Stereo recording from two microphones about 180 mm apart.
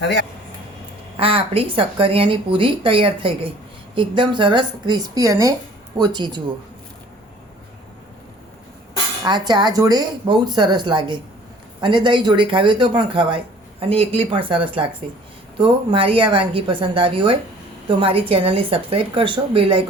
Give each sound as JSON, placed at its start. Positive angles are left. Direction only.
{"t": 0.0, "sound": "speech", "side_deg": 75}
{"t": 1.1, "sound": "speech", "side_deg": -30}
{"t": 9.2, "sound": "speech", "side_deg": -20}